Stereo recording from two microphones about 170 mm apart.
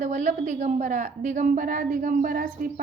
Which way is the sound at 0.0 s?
45° right (ahead or behind).